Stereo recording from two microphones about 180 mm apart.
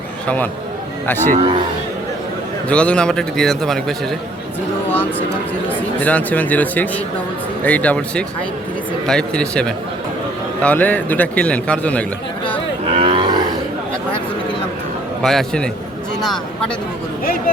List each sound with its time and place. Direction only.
1.0 s a man's voice: 10° left (ahead or behind)
2.6 s a man's voice: 5° left (ahead or behind)
5.6 s a man's voice: 10° left (ahead or behind)
12.9 s livestock: 30° right (ahead or behind)
15.2 s a man's voice: centre (ahead or behind)